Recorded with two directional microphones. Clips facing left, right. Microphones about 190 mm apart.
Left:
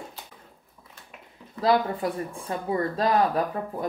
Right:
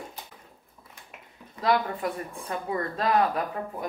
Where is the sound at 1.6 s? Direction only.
30° left (ahead or behind).